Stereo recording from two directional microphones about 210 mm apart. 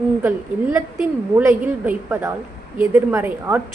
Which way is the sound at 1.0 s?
10° right (ahead or behind).